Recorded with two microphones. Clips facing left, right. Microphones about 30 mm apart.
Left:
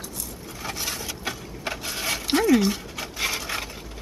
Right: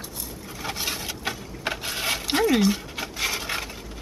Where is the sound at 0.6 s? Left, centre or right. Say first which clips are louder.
Right 1 dB; centre.